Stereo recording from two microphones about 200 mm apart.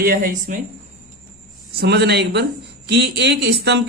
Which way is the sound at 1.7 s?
55° right (ahead or behind).